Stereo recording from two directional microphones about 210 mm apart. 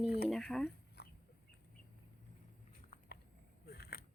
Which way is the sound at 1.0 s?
50° left (ahead or behind).